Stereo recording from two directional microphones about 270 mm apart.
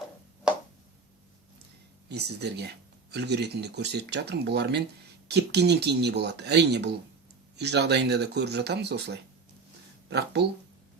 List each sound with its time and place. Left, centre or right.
2.0 s speech: right